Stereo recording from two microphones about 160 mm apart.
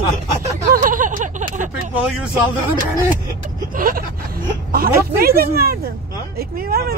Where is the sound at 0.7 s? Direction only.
55° right (ahead or behind).